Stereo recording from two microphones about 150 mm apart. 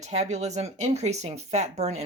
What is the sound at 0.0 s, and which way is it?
Speech, 50° right (ahead or behind).